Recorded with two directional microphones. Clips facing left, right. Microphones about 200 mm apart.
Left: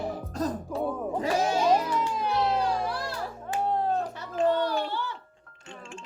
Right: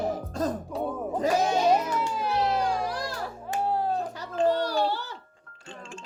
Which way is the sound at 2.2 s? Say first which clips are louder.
Right 1 dB; 10° right (ahead or behind).